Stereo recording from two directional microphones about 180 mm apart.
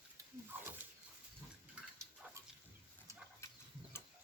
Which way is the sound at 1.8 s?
5° right (ahead or behind).